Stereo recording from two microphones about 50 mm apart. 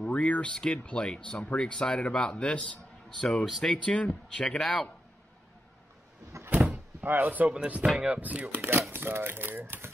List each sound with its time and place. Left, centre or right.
0.0 s a sound: left
0.5 s speech: centre
4.1 s speech: centre
6.5 s door: right
7.2 s speech: right
8.9 s speech: right